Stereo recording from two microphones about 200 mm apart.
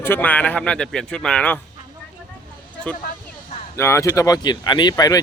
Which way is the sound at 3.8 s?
15° left (ahead or behind).